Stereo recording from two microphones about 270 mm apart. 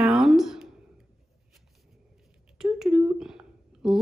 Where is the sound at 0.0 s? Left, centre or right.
Centre.